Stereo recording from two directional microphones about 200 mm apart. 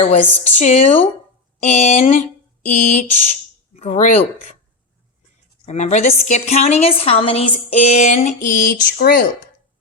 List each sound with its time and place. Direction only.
0.6 s a woman's voice: 35° left (ahead or behind)
5.6 s a woman's voice: 35° left (ahead or behind)